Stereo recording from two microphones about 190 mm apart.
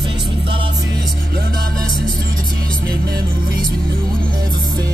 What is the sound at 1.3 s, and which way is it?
Music, 55° right (ahead or behind).